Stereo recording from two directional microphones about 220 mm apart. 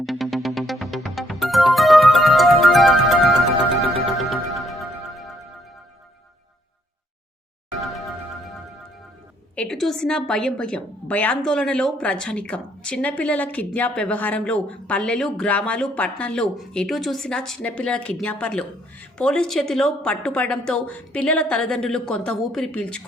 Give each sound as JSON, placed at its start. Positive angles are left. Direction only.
{"t": 0.0, "sound": "music", "side_deg": 0}
{"t": 4.2, "sound": "music", "side_deg": 0}
{"t": 9.6, "sound": "a woman's voice", "side_deg": 0}